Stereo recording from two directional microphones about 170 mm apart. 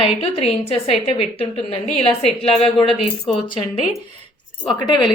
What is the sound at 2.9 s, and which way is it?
Speech, centre (ahead or behind).